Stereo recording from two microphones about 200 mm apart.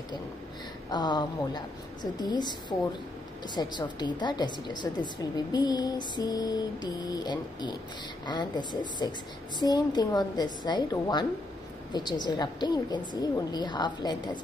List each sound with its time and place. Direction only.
0.8 s a woman's voice: 20° left (ahead or behind)
3.5 s a woman's voice: 20° left (ahead or behind)